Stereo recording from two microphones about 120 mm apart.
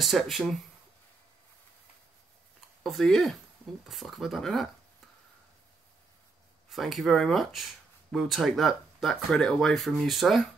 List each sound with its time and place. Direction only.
0.0 s speech: centre (ahead or behind)
2.8 s speech: 5° left (ahead or behind)
6.7 s speech: centre (ahead or behind)